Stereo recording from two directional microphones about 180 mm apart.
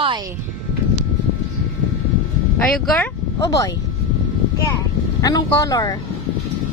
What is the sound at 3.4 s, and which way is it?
Speech, 20° left (ahead or behind).